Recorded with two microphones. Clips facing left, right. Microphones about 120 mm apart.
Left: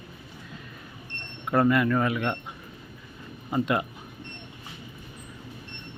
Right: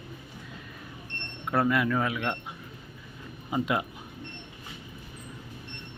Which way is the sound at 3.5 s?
5° right (ahead or behind).